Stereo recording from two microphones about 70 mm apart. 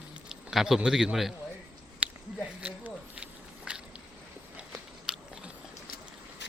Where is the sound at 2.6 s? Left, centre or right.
Centre.